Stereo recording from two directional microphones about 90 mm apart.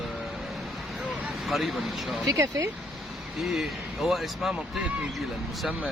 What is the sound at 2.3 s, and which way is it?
Speech, 35° right (ahead or behind).